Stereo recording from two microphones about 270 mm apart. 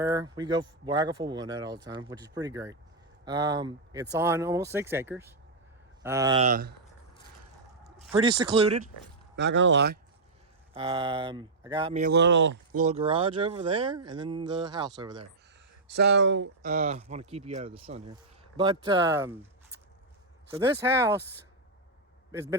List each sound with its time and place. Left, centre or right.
0.0 s speech: centre
6.4 s speech: right
8.1 s speech: centre
9.3 s speech: right
10.8 s speech: centre
12.0 s speech: right
12.8 s speech: right
16.1 s speech: right
16.6 s speech: right; by 19.5 s centre
20.8 s speech: centre
22.3 s a man's voice: centre